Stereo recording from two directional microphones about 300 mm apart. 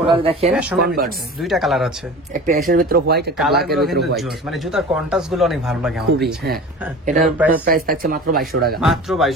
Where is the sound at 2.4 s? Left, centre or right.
Right.